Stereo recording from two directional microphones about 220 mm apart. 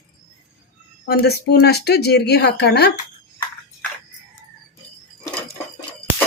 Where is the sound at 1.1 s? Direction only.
45° left (ahead or behind).